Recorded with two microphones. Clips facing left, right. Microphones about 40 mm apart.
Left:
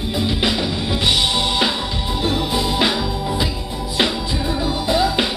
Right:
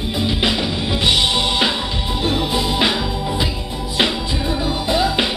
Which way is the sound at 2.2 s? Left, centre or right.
Centre.